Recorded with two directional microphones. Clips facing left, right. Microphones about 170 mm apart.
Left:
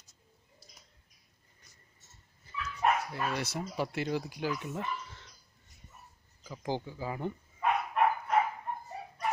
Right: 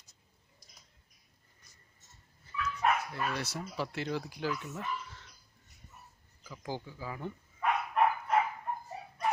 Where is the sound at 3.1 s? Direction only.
20° left (ahead or behind).